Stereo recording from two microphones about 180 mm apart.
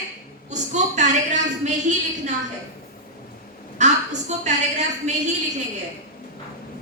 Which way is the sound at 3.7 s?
40° right (ahead or behind).